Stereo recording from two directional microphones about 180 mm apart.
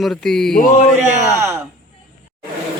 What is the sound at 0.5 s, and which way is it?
Speech, 50° left (ahead or behind).